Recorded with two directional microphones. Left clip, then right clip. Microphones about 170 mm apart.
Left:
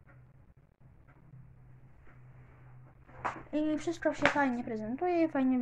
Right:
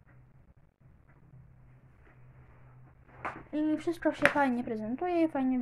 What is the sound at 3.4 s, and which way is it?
Speech, centre (ahead or behind).